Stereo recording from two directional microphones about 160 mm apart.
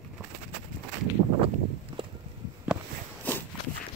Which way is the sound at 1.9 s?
30° right (ahead or behind).